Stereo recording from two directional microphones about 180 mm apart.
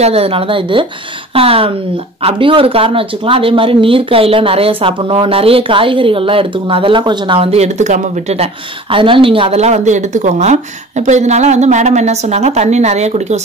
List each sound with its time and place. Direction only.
0.0 s speech: 35° right (ahead or behind)
8.9 s speech: 30° right (ahead or behind)